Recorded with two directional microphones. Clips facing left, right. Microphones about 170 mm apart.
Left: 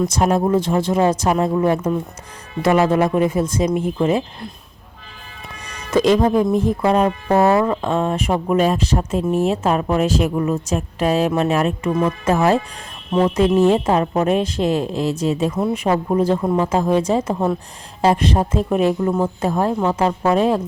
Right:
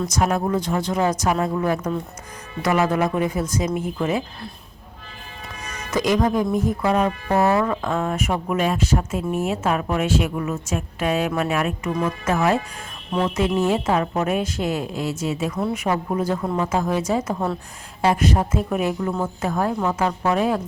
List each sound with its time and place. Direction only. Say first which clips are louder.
0.1 s speech: left 5 dB; 25° left (ahead or behind)
5.6 s speech: left 6 dB; 30° left (ahead or behind)